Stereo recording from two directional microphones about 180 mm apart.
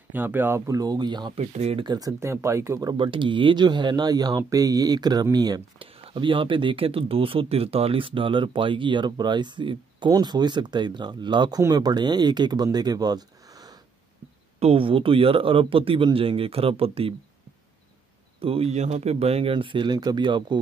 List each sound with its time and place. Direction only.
0.1 s speech: 10° right (ahead or behind)
1.4 s speech: 40° right (ahead or behind); by 13.7 s 20° right (ahead or behind)
14.6 s a man's voice: 30° right (ahead or behind)
18.4 s a man's voice: 30° right (ahead or behind)